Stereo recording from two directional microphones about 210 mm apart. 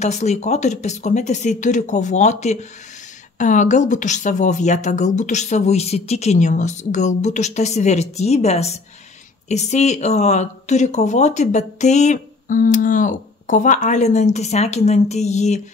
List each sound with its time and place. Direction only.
0.0 s speech: 35° left (ahead or behind)